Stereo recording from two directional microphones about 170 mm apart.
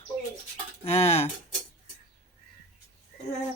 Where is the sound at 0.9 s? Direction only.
40° left (ahead or behind).